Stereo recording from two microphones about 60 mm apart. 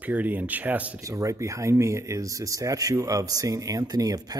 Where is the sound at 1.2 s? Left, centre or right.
Right.